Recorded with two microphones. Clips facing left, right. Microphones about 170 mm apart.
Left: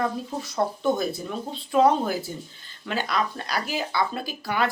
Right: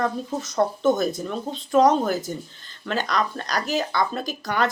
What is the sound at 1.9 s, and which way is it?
Speech, 45° right (ahead or behind).